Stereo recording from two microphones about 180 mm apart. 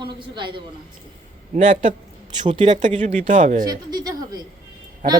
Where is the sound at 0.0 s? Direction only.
25° right (ahead or behind).